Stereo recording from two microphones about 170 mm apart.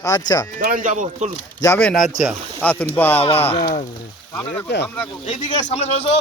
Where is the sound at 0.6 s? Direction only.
50° right (ahead or behind).